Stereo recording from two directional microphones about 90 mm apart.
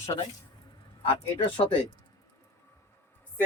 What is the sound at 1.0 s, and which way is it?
Speech, 80° left.